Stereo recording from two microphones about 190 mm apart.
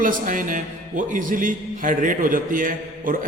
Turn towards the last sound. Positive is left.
turn(degrees=-45)  # may be behind; listen again after turning